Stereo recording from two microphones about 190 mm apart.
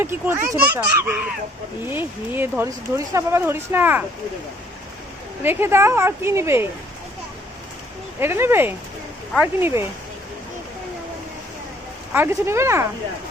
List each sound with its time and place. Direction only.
0.0 s speech: 10° right (ahead or behind)
5.4 s speech: 10° right (ahead or behind)
8.2 s speech: 10° right (ahead or behind)
12.1 s speech: 15° right (ahead or behind)